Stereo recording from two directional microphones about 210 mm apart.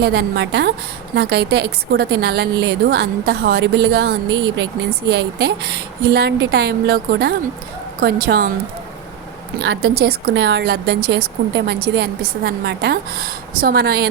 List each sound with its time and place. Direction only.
0.0 s a woman's voice: 50° right (ahead or behind)
9.6 s a woman's voice: 55° right (ahead or behind)